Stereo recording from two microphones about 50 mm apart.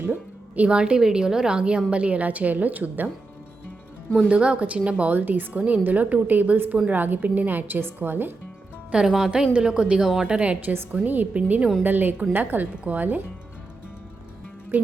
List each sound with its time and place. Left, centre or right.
0.0 s music: right
0.7 s a woman's voice: centre; by 3.1 s right
4.3 s a woman's voice: right
5.1 s a woman's voice: right
8.9 s a woman's voice: centre
10.9 s a woman's voice: right